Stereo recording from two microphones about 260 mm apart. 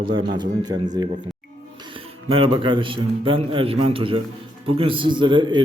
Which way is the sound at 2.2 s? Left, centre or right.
Right.